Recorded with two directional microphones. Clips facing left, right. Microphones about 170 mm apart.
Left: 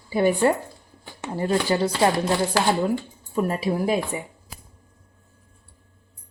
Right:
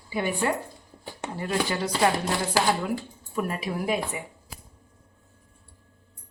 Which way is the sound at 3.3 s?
30° left (ahead or behind).